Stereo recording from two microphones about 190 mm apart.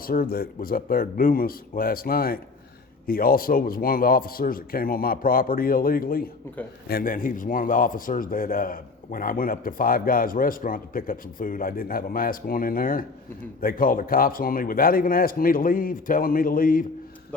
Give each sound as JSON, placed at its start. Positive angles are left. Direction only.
{"t": 0.0, "sound": "a man's voice", "side_deg": 50}